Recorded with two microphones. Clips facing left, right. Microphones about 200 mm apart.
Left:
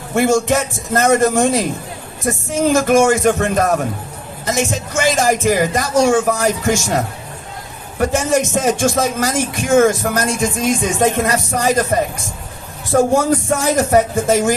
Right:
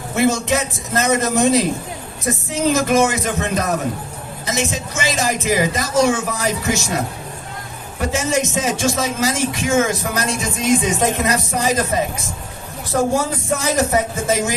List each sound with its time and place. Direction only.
0.2 s speech: 50° left (ahead or behind)
2.6 s speech: 50° left (ahead or behind)
7.9 s speech: 50° left (ahead or behind)